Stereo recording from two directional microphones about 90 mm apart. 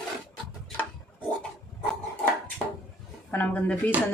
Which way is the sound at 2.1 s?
20° left (ahead or behind).